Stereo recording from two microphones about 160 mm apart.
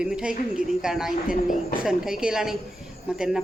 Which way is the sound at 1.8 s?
5° right (ahead or behind).